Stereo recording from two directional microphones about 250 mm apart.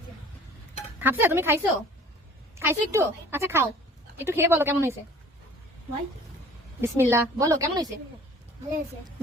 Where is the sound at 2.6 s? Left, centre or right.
Centre.